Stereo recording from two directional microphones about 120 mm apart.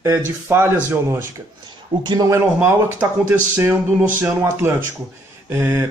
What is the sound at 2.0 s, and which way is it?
Speech, 40° right (ahead or behind).